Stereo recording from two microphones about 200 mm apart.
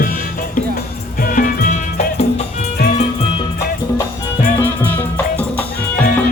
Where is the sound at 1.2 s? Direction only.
40° left (ahead or behind).